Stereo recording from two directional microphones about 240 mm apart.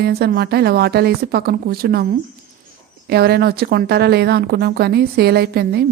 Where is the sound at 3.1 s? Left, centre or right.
Right.